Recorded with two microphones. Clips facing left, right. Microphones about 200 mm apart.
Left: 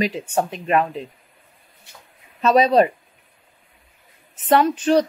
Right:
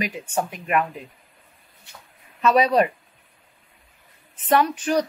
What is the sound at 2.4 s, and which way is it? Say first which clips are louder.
Speech: left 3 dB; 25° left (ahead or behind).